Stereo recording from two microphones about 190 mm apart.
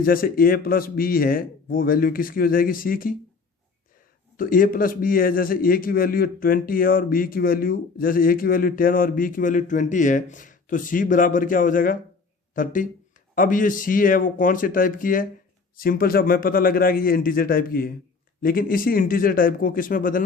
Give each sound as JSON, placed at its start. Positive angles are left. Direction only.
{"t": 0.0, "sound": "a man's voice", "side_deg": 50}
{"t": 4.4, "sound": "a man's voice", "side_deg": 45}